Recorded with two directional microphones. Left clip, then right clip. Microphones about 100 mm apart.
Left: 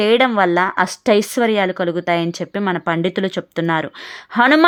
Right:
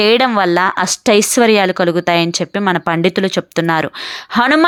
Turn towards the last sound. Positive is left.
turn(degrees=-35)  # may be behind; listen again after turning